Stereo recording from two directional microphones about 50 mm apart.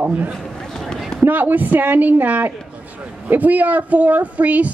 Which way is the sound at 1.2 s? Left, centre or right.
Right.